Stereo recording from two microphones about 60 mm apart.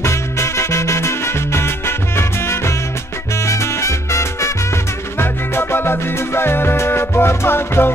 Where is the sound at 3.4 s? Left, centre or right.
Left.